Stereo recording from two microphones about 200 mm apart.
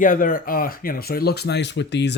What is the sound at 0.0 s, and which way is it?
Speech, 45° left (ahead or behind).